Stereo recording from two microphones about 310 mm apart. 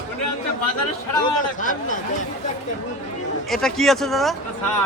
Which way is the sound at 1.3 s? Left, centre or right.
Left.